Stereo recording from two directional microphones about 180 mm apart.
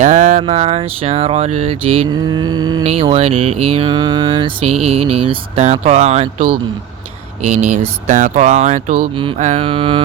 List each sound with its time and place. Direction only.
0.0 s mantra: 45° right (ahead or behind); by 2.8 s 20° right (ahead or behind)
2.8 s mantra: 35° right (ahead or behind)
8.0 s speech: 45° right (ahead or behind)
9.4 s mantra: 35° right (ahead or behind)